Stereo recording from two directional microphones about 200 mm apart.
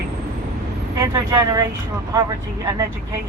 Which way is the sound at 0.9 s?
15° right (ahead or behind).